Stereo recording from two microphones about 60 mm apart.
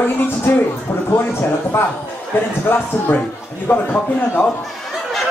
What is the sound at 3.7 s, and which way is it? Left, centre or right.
Speech, left.